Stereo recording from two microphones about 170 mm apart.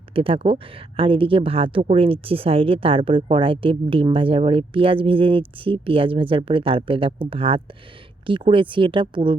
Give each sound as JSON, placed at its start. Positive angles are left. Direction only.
{"t": 0.1, "sound": "speech", "side_deg": -30}